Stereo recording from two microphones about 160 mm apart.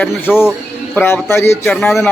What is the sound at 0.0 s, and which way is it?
A man's voice, 15° left (ahead or behind).